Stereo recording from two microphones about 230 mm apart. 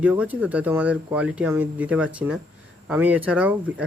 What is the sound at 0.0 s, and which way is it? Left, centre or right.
Speech, centre.